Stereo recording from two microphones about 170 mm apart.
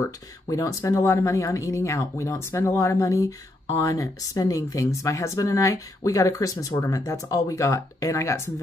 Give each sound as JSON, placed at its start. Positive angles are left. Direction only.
{"t": 0.0, "sound": "speech", "side_deg": 20}